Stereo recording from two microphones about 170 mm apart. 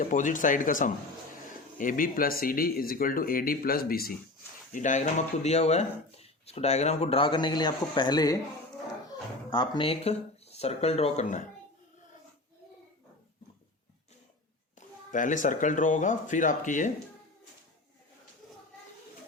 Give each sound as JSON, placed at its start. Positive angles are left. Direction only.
{"t": 0.0, "sound": "speech", "side_deg": 50}
{"t": 4.7, "sound": "speech", "side_deg": 45}
{"t": 14.8, "sound": "speech", "side_deg": 50}